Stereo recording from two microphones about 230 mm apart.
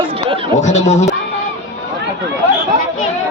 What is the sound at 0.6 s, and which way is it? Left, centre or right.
Speech, left.